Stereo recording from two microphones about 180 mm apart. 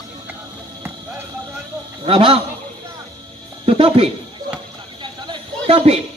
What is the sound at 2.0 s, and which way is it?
Speech, 30° right (ahead or behind).